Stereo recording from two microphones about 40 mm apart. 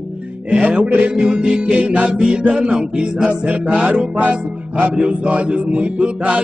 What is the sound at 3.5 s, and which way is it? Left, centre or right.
Music, right.